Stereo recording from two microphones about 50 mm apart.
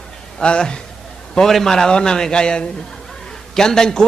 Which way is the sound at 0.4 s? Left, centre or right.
Centre.